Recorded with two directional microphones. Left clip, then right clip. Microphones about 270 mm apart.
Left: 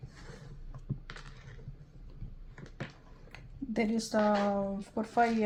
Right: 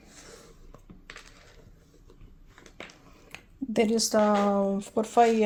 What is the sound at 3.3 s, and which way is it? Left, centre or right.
Speech, right.